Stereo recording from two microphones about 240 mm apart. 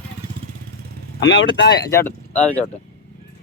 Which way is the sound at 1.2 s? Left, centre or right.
Left.